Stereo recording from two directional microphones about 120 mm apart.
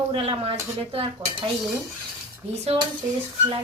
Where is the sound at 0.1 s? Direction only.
50° right (ahead or behind).